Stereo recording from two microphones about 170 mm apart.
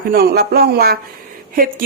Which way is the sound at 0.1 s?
65° right (ahead or behind).